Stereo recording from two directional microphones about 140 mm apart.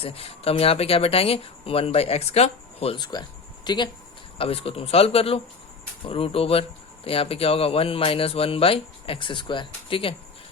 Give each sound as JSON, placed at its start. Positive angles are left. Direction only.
{"t": 0.0, "sound": "speech", "side_deg": 45}
{"t": 3.0, "sound": "speech", "side_deg": 30}
{"t": 4.4, "sound": "speech", "side_deg": 45}